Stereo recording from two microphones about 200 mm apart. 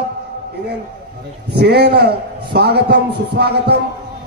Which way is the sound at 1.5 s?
55° right (ahead or behind).